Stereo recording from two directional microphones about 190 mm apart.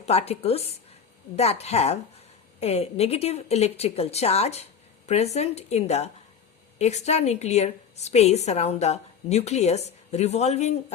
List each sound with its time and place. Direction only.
0.0 s a woman's voice: 35° left (ahead or behind)